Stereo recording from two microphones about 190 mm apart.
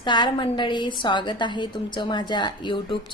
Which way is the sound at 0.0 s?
25° left (ahead or behind).